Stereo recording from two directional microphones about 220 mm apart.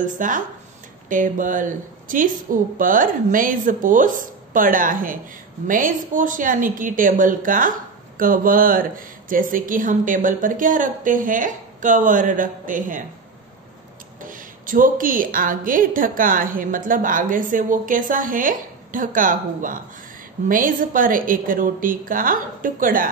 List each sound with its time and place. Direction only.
0.0 s a woman's voice: 35° right (ahead or behind)
14.2 s a woman's voice: 40° right (ahead or behind)